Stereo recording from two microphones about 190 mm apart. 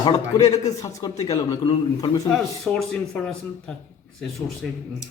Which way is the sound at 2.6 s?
Centre (ahead or behind).